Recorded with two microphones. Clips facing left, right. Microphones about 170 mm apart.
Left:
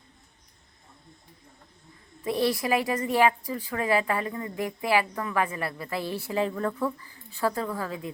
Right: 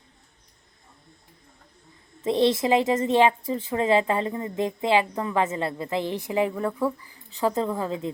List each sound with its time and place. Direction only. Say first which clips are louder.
2.2 s a woman's voice: right 5 dB; 25° right (ahead or behind)